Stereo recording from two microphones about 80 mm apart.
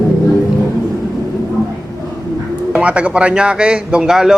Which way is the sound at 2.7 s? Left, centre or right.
Centre.